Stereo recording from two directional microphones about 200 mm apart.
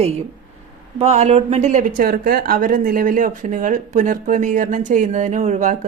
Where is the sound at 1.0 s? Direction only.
30° right (ahead or behind).